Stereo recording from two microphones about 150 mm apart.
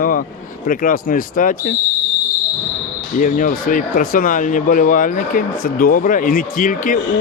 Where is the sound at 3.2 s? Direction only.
65° left (ahead or behind).